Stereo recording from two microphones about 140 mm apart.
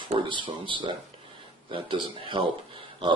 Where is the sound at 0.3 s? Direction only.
35° right (ahead or behind).